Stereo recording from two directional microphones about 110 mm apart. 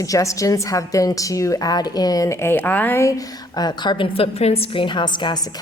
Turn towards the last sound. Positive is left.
turn(degrees=45)  # may be behind; listen again after turning